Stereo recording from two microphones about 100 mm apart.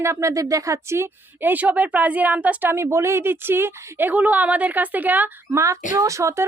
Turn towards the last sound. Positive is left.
turn(degrees=-30)  # may be behind; listen again after turning